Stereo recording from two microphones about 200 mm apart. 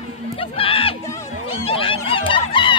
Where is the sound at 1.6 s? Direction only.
25° left (ahead or behind).